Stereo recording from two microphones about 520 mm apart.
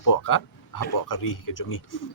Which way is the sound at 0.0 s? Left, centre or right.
Left.